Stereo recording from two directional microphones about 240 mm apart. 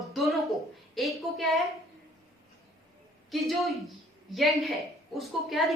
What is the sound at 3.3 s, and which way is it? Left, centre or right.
A woman's voice, centre.